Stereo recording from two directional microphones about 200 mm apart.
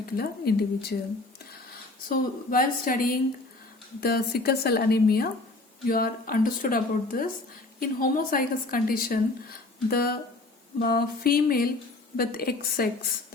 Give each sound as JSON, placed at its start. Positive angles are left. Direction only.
{"t": 0.0, "sound": "speech", "side_deg": 50}
{"t": 2.0, "sound": "speech", "side_deg": 45}